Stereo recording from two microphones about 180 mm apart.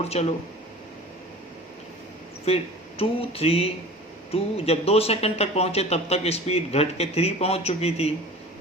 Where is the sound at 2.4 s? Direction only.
35° left (ahead or behind).